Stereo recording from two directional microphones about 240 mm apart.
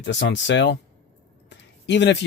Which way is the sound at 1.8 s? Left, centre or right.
Left.